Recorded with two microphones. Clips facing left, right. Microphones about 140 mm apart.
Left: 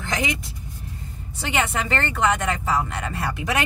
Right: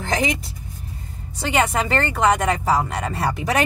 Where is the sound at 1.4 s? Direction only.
35° right (ahead or behind).